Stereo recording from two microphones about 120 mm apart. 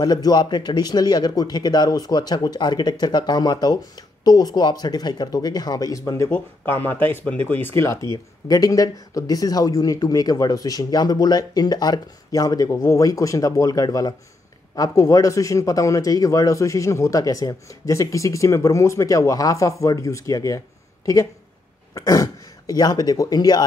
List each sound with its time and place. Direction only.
0.0 s speech: 35° left (ahead or behind)